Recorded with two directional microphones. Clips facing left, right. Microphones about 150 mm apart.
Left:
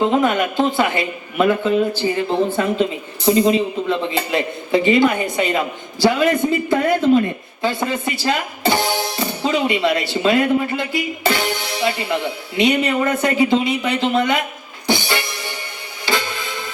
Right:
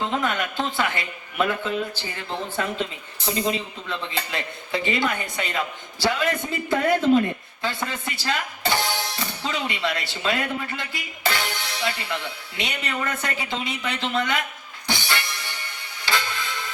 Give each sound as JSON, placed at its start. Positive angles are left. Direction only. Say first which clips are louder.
{"t": 0.0, "sound": "speech", "louder": "left 9 dB", "side_deg": 15}
{"t": 2.2, "sound": "a woman's voice", "louder": "left 10 dB", "side_deg": 50}
{"t": 2.6, "sound": "speech", "louder": "left 9 dB", "side_deg": 20}
{"t": 14.8, "sound": "music", "louder": "left 8 dB", "side_deg": 15}